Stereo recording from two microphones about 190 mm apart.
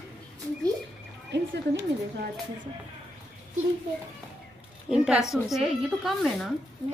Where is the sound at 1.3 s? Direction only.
65° right (ahead or behind).